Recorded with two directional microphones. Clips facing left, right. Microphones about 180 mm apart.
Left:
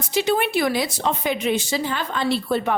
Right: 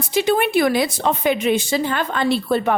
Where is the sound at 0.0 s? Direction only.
55° right (ahead or behind).